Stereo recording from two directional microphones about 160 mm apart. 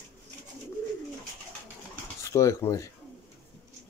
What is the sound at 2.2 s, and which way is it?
Speech, 20° left (ahead or behind).